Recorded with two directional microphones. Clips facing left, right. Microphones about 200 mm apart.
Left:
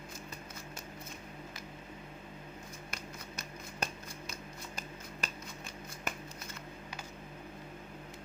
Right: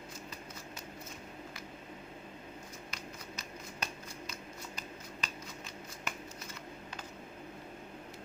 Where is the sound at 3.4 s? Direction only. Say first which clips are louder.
Left 4 dB; 50° left (ahead or behind).